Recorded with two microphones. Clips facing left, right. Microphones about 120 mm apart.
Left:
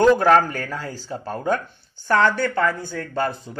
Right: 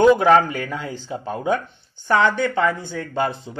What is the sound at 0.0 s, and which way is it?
Speech, 15° right (ahead or behind).